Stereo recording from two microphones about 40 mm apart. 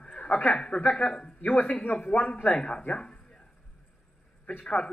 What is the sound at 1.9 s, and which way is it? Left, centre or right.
Speech, left.